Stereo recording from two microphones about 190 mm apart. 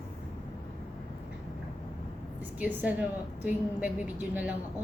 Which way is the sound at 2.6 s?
10° right (ahead or behind).